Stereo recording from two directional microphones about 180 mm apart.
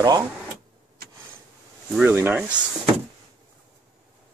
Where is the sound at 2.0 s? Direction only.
10° right (ahead or behind).